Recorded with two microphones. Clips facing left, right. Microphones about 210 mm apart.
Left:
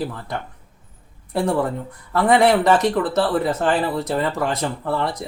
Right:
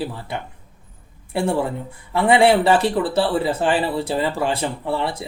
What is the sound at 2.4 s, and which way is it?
Speech, 30° right (ahead or behind).